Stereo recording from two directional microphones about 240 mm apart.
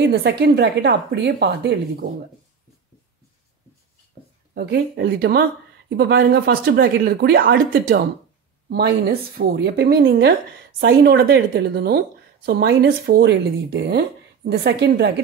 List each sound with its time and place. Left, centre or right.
0.0 s speech: right
4.6 s speech: right
8.6 s speech: right